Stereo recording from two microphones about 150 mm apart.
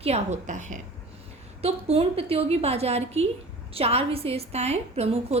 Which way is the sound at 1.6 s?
40° right (ahead or behind).